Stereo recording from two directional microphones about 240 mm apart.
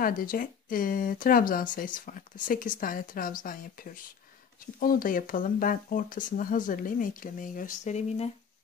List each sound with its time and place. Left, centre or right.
0.0 s speech: left